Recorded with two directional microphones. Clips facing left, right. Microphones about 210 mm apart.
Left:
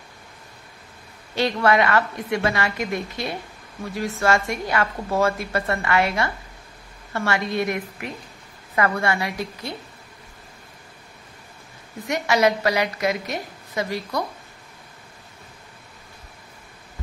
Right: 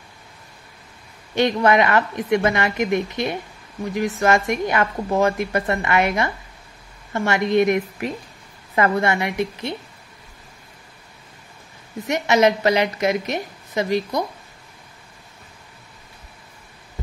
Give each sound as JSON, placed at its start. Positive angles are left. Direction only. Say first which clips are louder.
{"t": 1.3, "sound": "a woman's voice", "louder": "right 3 dB", "side_deg": -20}
{"t": 12.1, "sound": "a woman's voice", "louder": "right 3 dB", "side_deg": -20}